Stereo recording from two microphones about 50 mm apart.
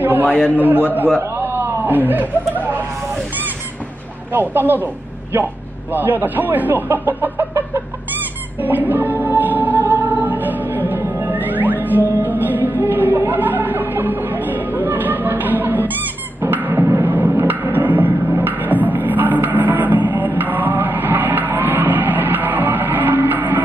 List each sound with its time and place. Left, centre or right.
0.0 s a sound: right
0.6 s speech: right
1.4 s a sound: right
1.8 s speech: right
4.3 s speech: right
8.5 s music: right
10.9 s music: right
13.3 s chatter: right
16.3 s music: right